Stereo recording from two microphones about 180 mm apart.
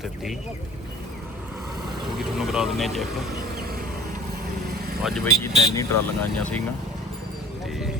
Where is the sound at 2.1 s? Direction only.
Centre (ahead or behind).